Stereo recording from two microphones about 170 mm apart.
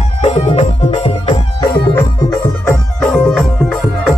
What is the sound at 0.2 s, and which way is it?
Music, 40° left (ahead or behind).